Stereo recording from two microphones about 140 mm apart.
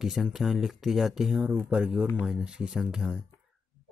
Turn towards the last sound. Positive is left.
turn(degrees=-5)  # may be behind; listen again after turning